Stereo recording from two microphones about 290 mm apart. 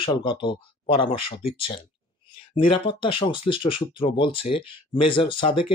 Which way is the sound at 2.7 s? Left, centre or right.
Centre.